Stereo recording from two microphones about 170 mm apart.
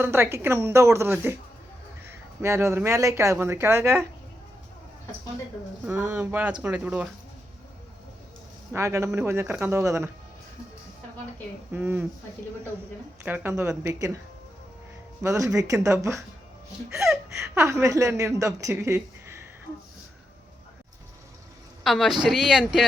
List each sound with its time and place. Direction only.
0.0 s a woman's voice: 15° right (ahead or behind)
2.4 s a woman's voice: 15° right (ahead or behind)
5.8 s a woman's voice: 15° right (ahead or behind)
8.7 s a woman's voice: 15° right (ahead or behind)
11.7 s a woman's voice: 10° right (ahead or behind)
13.2 s a woman's voice: 10° right (ahead or behind)
15.2 s speech: 20° right (ahead or behind)
17.5 s a woman's voice: 15° right (ahead or behind)
21.8 s speech: centre (ahead or behind)